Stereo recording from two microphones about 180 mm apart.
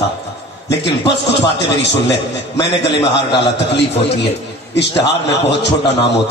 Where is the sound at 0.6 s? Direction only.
70° left (ahead or behind).